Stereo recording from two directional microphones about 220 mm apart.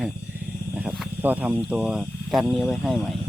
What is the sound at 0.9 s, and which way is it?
Speech, 5° right (ahead or behind).